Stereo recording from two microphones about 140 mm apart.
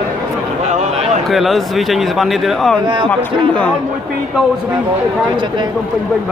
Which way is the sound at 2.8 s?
35° right (ahead or behind).